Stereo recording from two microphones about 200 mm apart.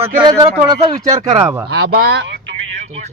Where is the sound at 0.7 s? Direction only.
20° right (ahead or behind).